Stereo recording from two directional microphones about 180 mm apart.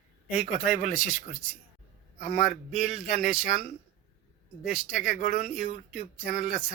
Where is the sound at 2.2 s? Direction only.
Centre (ahead or behind).